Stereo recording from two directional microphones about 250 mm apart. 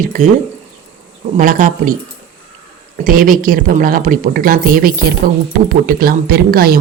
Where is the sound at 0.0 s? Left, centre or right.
Right.